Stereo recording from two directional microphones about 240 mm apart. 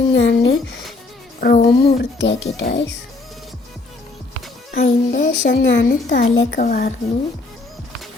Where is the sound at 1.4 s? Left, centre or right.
Left.